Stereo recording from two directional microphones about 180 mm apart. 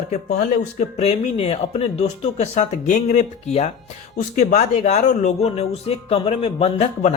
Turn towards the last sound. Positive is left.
turn(degrees=35)  # may be behind; listen again after turning